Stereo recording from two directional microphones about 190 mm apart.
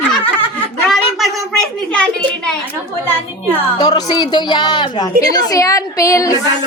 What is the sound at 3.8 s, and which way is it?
A woman's voice, 20° left (ahead or behind).